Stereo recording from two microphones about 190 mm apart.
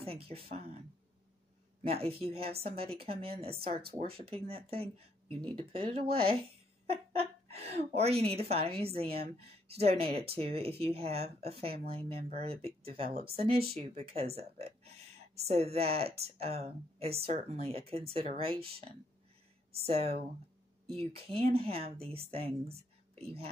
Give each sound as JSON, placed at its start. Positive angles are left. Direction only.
{"t": 0.0, "sound": "speech", "side_deg": -30}
{"t": 1.8, "sound": "speech", "side_deg": -30}
{"t": 13.1, "sound": "speech", "side_deg": -55}
{"t": 13.7, "sound": "speech", "side_deg": -30}